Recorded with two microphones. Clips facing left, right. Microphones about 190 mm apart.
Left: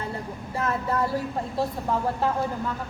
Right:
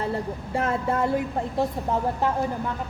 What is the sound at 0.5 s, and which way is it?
Speech, 30° right (ahead or behind).